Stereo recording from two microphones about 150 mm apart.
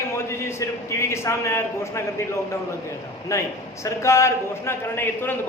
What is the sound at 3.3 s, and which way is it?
A man's voice, 20° left (ahead or behind).